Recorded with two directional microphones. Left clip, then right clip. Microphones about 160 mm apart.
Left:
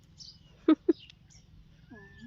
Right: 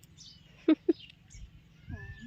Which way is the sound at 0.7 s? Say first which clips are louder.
Left 2 dB; 10° left (ahead or behind).